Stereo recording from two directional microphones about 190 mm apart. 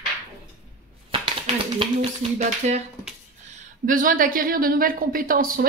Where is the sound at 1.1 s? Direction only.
30° right (ahead or behind).